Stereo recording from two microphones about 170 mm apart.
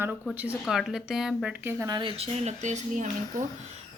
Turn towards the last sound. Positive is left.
turn(degrees=-45)  # may be behind; listen again after turning